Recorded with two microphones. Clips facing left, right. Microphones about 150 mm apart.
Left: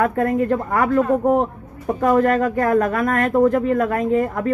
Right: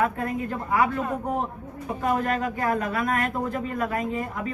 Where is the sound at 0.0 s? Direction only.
50° left (ahead or behind).